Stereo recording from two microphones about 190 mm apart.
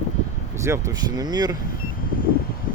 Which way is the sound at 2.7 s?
45° left (ahead or behind).